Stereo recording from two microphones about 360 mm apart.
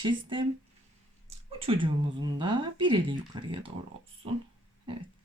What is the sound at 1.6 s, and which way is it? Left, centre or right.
Speech, centre.